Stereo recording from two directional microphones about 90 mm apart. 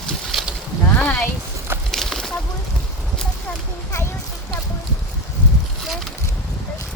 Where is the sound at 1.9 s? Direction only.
5° left (ahead or behind).